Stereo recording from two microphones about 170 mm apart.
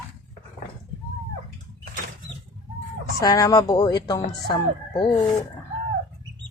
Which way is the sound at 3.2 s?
20° left (ahead or behind).